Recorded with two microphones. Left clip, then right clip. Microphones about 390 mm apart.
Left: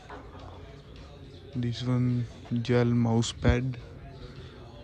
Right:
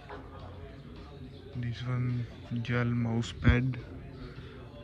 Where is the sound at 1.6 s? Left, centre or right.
Centre.